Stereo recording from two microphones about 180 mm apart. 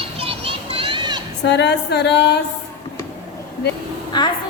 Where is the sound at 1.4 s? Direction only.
70° left (ahead or behind).